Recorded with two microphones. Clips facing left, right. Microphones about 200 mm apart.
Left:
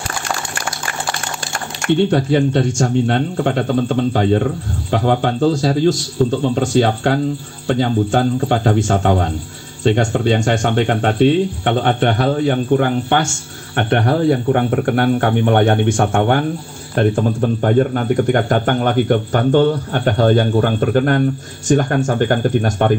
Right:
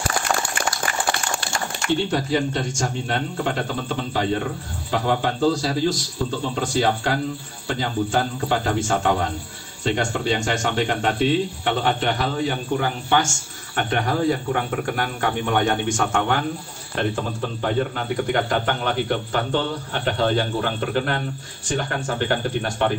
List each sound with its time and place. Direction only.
1.8 s speech: 55° left (ahead or behind)